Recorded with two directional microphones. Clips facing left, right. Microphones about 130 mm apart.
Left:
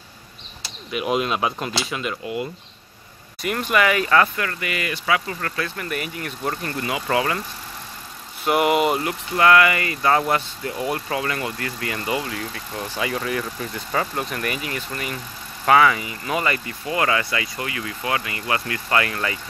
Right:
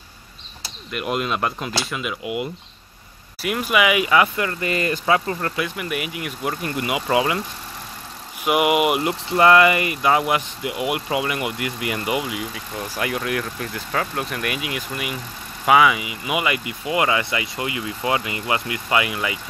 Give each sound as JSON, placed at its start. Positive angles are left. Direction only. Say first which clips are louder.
{"t": 0.8, "sound": "speech", "louder": "left 2 dB", "side_deg": 0}
{"t": 2.2, "sound": "speech", "louder": "right 1 dB", "side_deg": -20}
{"t": 3.4, "sound": "speech", "louder": "right 1 dB", "side_deg": -5}
{"t": 4.4, "sound": "speech", "louder": "right 3 dB", "side_deg": -20}
{"t": 4.6, "sound": "speech", "louder": "right 4 dB", "side_deg": -35}
{"t": 5.4, "sound": "speech", "louder": "right 2 dB", "side_deg": -10}
{"t": 8.5, "sound": "speech", "louder": "even", "side_deg": -5}
{"t": 9.0, "sound": "speech", "louder": "right 2 dB", "side_deg": -25}